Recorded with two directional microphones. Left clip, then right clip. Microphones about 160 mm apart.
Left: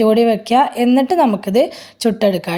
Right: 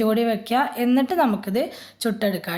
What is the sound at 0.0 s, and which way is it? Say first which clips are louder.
Speech: left 9 dB; 35° left (ahead or behind).